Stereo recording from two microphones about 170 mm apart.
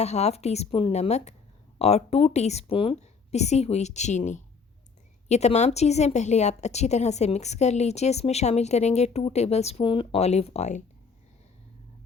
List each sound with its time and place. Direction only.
0.0 s a woman's voice: 40° left (ahead or behind)